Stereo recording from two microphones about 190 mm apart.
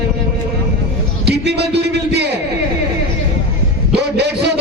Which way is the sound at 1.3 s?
60° right (ahead or behind).